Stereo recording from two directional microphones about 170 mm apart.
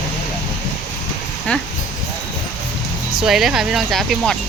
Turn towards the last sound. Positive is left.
turn(degrees=0)  # may be behind; listen again after turning